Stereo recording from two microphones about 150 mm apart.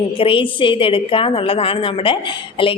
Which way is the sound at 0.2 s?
35° left (ahead or behind).